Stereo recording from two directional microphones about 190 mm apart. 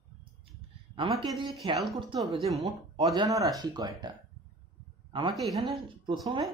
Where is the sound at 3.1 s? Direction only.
20° right (ahead or behind).